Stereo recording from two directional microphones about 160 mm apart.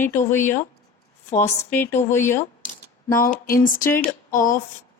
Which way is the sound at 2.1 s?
15° left (ahead or behind).